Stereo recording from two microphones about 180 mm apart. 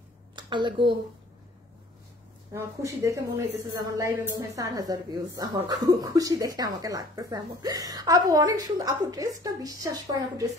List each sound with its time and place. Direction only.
0.4 s a woman's voice: 25° right (ahead or behind)
2.5 s speech: 15° right (ahead or behind)